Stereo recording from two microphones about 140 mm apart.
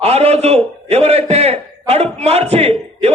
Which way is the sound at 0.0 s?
45° right (ahead or behind).